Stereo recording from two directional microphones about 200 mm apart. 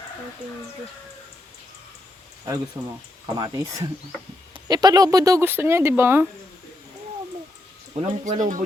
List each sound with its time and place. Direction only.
3.3 s speech: 20° right (ahead or behind)
7.9 s speech: 35° right (ahead or behind)